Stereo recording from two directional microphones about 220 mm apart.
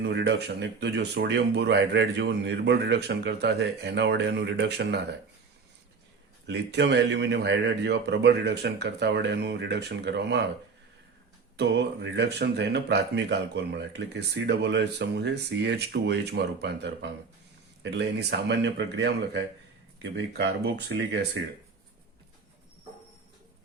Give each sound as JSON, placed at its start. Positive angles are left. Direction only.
{"t": 0.0, "sound": "speech", "side_deg": -50}
{"t": 6.4, "sound": "speech", "side_deg": -50}
{"t": 11.5, "sound": "speech", "side_deg": -50}